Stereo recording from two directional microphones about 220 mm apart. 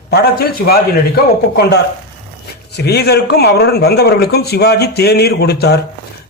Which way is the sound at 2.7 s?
50° left (ahead or behind).